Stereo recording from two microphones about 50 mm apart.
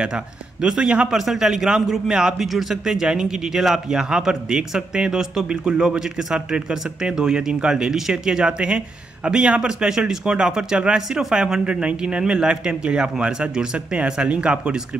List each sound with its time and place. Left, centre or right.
0.0 s a man's voice: centre